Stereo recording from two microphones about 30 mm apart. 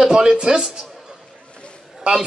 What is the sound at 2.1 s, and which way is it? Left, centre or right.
Speech, right.